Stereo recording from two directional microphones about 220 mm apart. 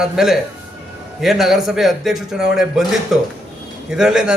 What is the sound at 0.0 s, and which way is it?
A man's voice, centre (ahead or behind).